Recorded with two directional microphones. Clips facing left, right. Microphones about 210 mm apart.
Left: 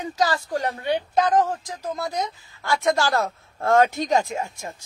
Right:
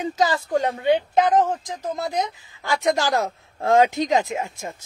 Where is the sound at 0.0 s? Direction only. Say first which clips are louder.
Right 2 dB; 20° right (ahead or behind).